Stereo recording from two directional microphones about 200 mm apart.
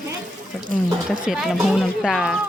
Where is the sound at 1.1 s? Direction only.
Centre (ahead or behind).